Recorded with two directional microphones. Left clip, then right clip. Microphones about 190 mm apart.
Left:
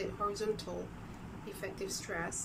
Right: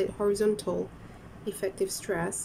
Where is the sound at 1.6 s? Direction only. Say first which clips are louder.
Right 10 dB; 30° right (ahead or behind).